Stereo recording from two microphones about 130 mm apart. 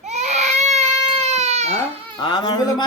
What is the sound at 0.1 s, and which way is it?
Baby cry, 60° right (ahead or behind).